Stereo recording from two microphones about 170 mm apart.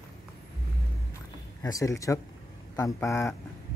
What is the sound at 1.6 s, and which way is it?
A man's voice, 20° left (ahead or behind).